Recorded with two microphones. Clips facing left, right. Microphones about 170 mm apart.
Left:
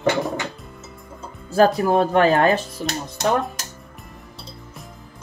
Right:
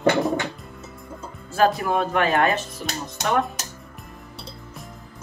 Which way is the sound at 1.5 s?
40° left (ahead or behind).